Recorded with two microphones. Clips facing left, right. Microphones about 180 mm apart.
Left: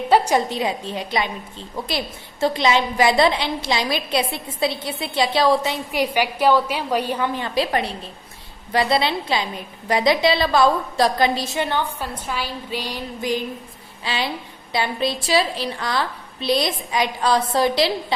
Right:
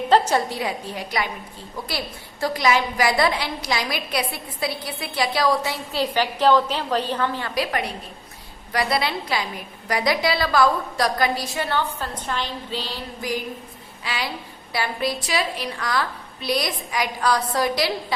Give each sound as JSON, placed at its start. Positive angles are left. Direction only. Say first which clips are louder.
{"t": 0.1, "sound": "a woman's voice", "louder": "left 2 dB", "side_deg": 15}